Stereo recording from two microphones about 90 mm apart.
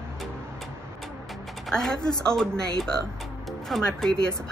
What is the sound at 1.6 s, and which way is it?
Speech, 5° left (ahead or behind).